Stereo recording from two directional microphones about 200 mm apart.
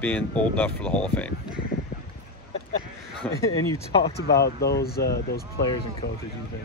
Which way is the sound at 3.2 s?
5° left (ahead or behind).